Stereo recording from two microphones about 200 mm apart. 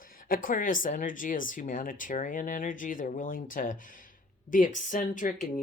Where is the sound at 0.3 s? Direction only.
45° left (ahead or behind).